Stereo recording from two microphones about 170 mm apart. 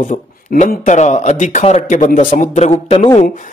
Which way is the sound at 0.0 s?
45° left (ahead or behind).